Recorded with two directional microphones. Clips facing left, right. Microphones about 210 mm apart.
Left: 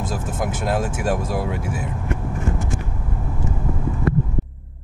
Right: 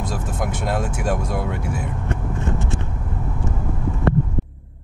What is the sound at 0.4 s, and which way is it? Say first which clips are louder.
Speech: left 2 dB; 5° left (ahead or behind).